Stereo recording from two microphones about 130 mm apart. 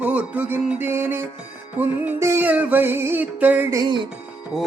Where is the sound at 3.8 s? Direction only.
35° right (ahead or behind).